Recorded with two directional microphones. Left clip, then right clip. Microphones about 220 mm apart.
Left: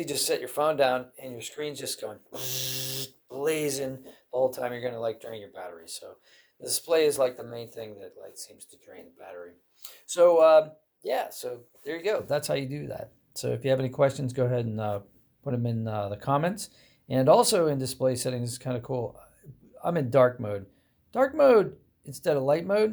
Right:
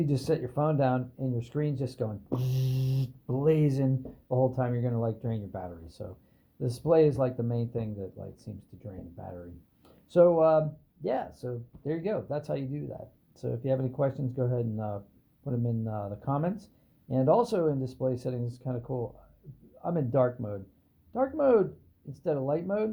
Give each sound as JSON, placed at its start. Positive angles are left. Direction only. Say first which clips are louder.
{"t": 0.0, "sound": "speech", "louder": "left 1 dB", "side_deg": 20}
{"t": 6.7, "sound": "speech", "louder": "even", "side_deg": 15}
{"t": 9.2, "sound": "speech", "louder": "left 3 dB", "side_deg": 20}